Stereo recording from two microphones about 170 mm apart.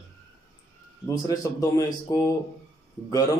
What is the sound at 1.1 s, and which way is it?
A man's voice, 20° left (ahead or behind).